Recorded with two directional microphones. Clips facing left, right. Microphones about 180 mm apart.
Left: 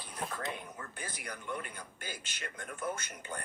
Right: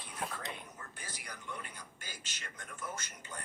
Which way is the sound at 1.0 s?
55° left (ahead or behind).